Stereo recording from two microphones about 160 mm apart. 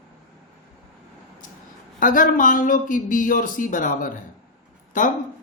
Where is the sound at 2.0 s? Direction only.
55° left (ahead or behind).